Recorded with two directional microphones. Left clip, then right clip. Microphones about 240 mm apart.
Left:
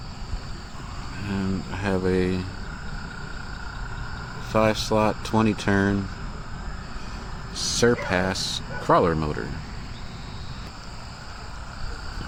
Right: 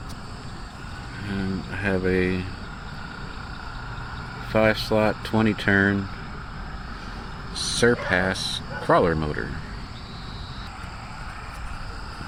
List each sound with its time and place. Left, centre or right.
1.3 s speech: centre
4.5 s speech: centre
7.5 s a sound: left
7.8 s speech: centre
8.4 s speech: left
8.9 s speech: centre